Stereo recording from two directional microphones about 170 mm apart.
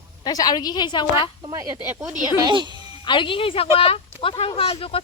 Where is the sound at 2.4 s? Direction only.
25° right (ahead or behind).